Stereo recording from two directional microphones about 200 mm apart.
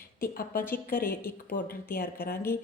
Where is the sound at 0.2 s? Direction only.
45° left (ahead or behind).